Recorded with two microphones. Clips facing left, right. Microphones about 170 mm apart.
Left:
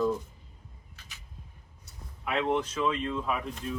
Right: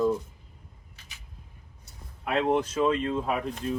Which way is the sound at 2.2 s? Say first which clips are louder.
Right 3 dB; 40° right (ahead or behind).